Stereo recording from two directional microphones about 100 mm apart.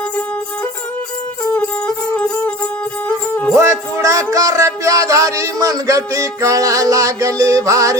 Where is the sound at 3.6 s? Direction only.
30° right (ahead or behind).